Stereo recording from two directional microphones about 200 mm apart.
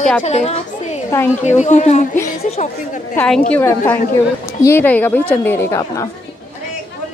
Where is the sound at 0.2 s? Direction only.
35° left (ahead or behind).